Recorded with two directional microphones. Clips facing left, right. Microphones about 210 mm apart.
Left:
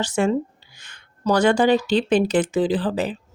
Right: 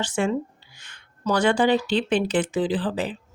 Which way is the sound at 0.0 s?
40° left (ahead or behind).